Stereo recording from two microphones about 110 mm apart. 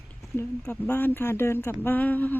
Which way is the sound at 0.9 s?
15° left (ahead or behind).